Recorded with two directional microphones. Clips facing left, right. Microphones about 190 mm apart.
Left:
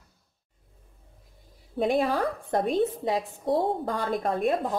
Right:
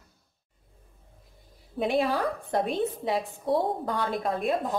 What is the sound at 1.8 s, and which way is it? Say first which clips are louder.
Speech: left 1 dB; 45° left (ahead or behind).